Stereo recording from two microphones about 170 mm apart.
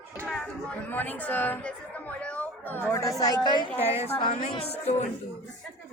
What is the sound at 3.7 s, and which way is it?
Speech, 35° left (ahead or behind).